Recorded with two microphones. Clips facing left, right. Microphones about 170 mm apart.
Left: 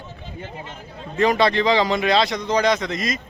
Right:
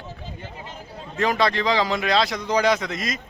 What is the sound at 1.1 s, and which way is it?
A man's voice, centre (ahead or behind).